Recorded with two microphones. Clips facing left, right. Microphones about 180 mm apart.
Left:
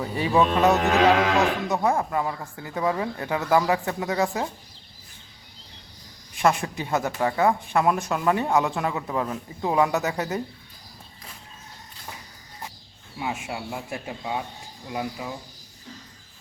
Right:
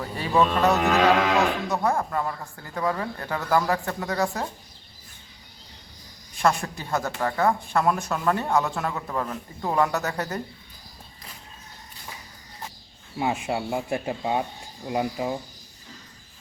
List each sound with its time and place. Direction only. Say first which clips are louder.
0.0 s speech: left 1 dB; 15° left (ahead or behind)
6.4 s speech: left 1 dB; 15° left (ahead or behind)
13.1 s speech: right 5 dB; 30° right (ahead or behind)